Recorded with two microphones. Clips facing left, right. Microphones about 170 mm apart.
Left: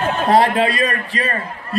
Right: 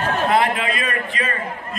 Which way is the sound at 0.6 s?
35° left (ahead or behind).